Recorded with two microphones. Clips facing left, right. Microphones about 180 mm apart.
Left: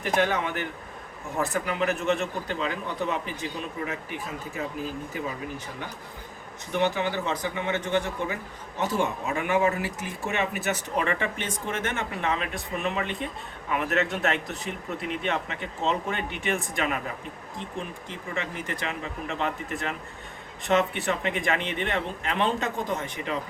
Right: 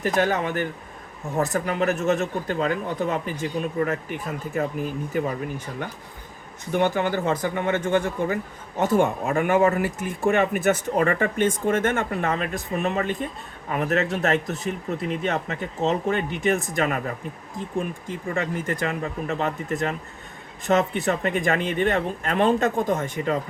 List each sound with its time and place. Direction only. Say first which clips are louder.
0.0 s speech: right 3 dB; 40° right (ahead or behind)
6.7 s speech: right 4 dB; 50° right (ahead or behind)
18.3 s speech: right 6 dB; 45° right (ahead or behind)